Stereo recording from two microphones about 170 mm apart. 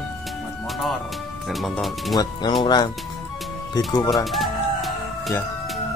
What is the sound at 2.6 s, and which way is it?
Speech, 25° left (ahead or behind).